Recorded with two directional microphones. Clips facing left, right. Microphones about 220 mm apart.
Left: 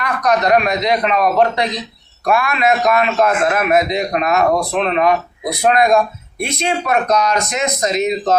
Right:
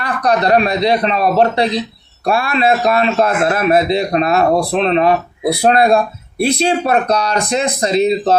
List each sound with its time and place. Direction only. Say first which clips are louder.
0.0 s a man's voice: right 1 dB; 30° right (ahead or behind)